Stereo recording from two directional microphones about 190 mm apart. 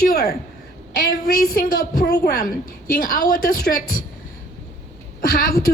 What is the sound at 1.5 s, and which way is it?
A woman's voice, 45° left (ahead or behind).